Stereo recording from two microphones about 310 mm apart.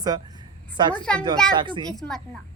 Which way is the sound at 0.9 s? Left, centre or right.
Centre.